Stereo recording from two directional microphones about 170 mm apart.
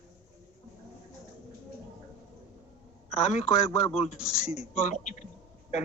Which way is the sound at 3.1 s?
40° left (ahead or behind).